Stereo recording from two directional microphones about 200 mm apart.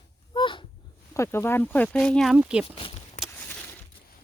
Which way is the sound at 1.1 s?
15° left (ahead or behind).